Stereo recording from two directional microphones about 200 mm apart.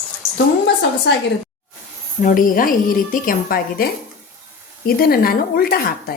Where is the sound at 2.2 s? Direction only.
40° left (ahead or behind).